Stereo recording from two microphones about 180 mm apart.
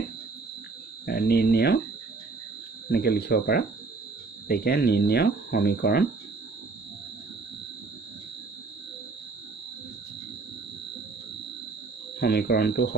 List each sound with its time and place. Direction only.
1.0 s speech: 60° left (ahead or behind)
2.9 s speech: 60° left (ahead or behind)
12.2 s speech: 60° left (ahead or behind)